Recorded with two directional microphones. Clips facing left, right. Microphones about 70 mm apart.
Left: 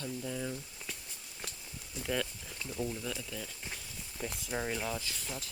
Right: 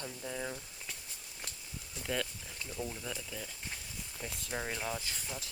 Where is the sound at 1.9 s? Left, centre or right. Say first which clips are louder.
Left 2 dB; centre.